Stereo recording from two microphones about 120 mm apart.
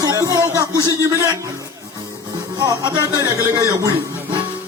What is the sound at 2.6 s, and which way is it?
A man's voice, 35° right (ahead or behind).